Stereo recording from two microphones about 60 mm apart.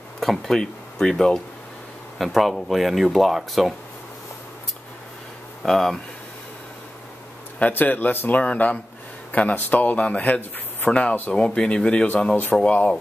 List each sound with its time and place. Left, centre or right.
0.2 s speech: centre
5.6 s speech: centre
7.5 s speech: left